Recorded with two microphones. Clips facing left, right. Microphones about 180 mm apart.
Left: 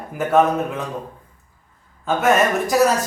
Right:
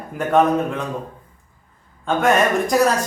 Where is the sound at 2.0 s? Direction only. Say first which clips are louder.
Even; 5° left (ahead or behind).